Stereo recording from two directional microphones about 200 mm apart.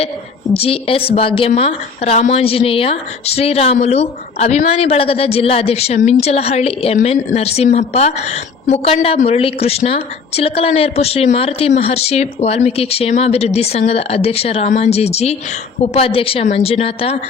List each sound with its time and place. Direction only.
0.5 s a woman's voice: 30° left (ahead or behind)